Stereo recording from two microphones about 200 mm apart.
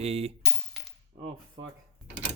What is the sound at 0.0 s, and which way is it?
Speech, 30° right (ahead or behind).